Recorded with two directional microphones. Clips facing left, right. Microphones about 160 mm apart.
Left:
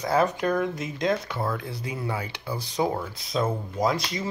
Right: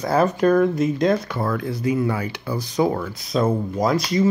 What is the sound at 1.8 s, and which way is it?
Speech, 25° left (ahead or behind).